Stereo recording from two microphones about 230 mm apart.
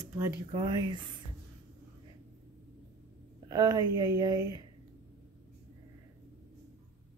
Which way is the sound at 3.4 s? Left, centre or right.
Centre.